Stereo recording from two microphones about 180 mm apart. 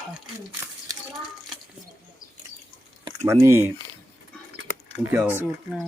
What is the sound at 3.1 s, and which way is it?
Speech, 15° right (ahead or behind).